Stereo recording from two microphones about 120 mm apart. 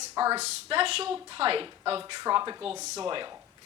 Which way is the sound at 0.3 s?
55° right (ahead or behind).